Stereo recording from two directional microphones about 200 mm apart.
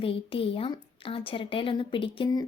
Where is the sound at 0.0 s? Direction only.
30° left (ahead or behind).